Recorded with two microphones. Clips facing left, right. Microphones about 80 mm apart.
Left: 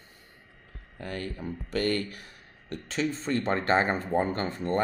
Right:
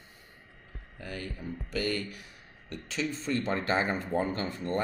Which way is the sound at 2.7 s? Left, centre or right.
Left.